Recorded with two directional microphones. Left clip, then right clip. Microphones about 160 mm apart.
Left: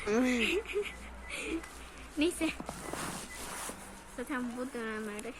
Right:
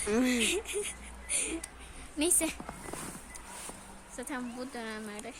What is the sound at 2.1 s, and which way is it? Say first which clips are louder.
Speech: even; 70° right (ahead or behind).